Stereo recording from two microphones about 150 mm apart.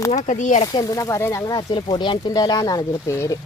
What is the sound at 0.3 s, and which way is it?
Speech, 55° left (ahead or behind).